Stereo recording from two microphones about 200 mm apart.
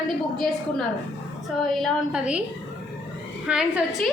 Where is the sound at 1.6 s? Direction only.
Centre (ahead or behind).